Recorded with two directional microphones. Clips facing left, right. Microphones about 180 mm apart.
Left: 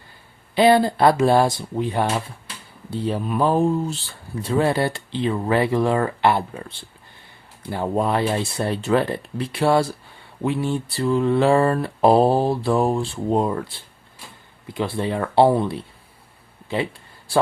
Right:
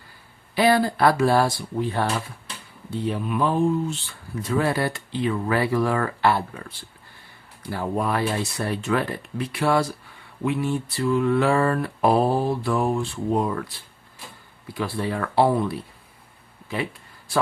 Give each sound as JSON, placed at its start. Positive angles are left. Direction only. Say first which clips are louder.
{"t": 0.5, "sound": "speech", "louder": "left 4 dB", "side_deg": 25}
{"t": 2.9, "sound": "speech", "louder": "left 2 dB", "side_deg": 35}